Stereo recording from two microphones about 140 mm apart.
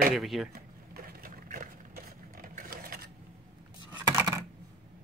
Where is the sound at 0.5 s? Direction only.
90° right.